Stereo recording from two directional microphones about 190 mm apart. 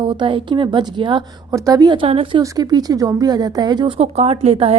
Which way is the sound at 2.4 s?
20° right (ahead or behind).